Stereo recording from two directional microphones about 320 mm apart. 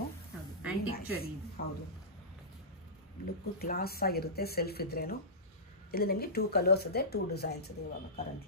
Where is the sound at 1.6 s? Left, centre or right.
Left.